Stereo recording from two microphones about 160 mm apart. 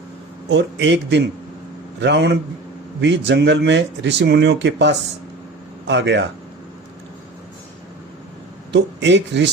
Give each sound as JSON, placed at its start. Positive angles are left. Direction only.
{"t": 0.5, "sound": "speech", "side_deg": -90}
{"t": 8.7, "sound": "speech", "side_deg": -90}